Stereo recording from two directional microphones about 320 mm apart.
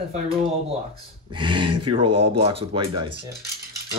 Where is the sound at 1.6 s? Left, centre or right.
Right.